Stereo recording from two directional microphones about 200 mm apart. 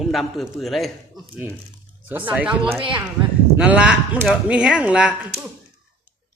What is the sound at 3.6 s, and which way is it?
Speech, 5° right (ahead or behind).